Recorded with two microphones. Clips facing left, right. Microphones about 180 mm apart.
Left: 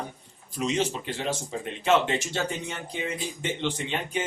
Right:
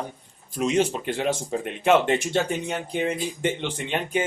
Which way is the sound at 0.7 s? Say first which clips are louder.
Right 5 dB; 55° right (ahead or behind).